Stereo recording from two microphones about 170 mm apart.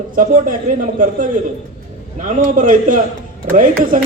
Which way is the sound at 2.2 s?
50° right (ahead or behind).